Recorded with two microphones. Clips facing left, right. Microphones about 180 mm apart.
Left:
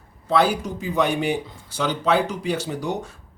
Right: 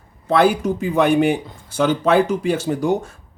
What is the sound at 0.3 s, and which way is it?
Speech, 55° right (ahead or behind).